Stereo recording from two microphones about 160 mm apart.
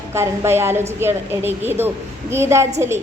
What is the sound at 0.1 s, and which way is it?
A woman's voice, 15° right (ahead or behind).